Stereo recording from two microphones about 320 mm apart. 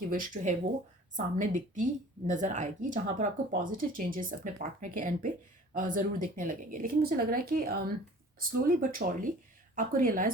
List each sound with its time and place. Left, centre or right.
0.1 s speech: right